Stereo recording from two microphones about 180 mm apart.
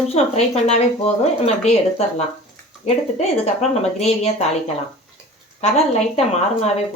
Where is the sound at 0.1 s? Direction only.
40° left (ahead or behind).